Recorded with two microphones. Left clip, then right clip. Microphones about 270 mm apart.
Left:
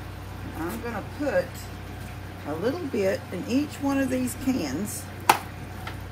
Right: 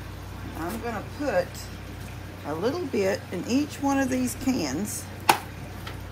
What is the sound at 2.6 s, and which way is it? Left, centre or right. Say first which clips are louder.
Speech: even; right.